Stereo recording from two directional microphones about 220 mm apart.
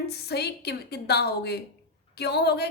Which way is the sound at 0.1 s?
45° left (ahead or behind).